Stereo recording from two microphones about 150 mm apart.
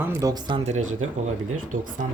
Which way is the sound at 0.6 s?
50° right (ahead or behind).